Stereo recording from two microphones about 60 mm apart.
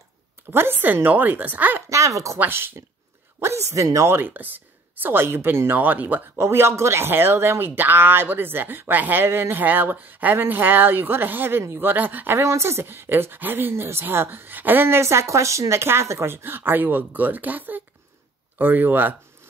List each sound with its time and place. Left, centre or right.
0.5 s speech: right
1.9 s speech: right
2.3 s speech: right
4.1 s speech: right
6.3 s speech: right
12.4 s speech: right
15.0 s speech: right